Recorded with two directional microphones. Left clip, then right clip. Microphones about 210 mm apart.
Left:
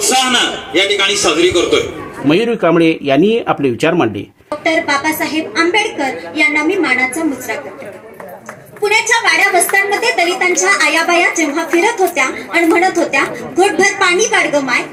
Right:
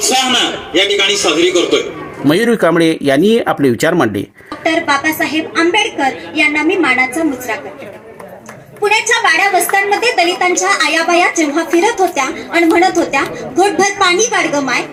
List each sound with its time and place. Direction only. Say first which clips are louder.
0.1 s a woman's voice: left 1 dB; 50° right (ahead or behind)
2.2 s speech: right 1 dB; 20° right (ahead or behind)
4.6 s a woman's voice: right 1 dB; 50° right (ahead or behind)
8.8 s a woman's voice: right 1 dB; 50° right (ahead or behind)